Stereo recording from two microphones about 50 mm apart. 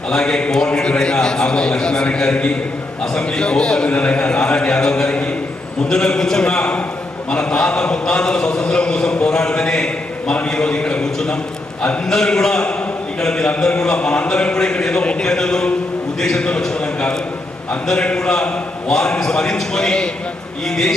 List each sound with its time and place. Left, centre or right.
0.1 s a man's voice: centre